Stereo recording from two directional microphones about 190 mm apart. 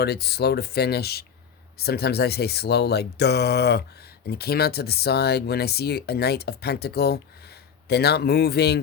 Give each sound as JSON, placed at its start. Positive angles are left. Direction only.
{"t": 0.0, "sound": "speech", "side_deg": 60}